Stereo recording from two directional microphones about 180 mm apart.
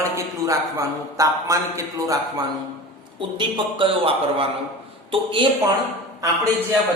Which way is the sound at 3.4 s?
30° right (ahead or behind).